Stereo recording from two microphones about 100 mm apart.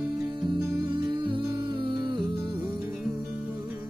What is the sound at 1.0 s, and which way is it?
Music, 50° right (ahead or behind).